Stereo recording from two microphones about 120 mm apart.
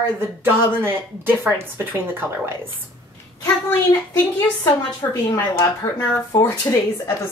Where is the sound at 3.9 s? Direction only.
20° left (ahead or behind).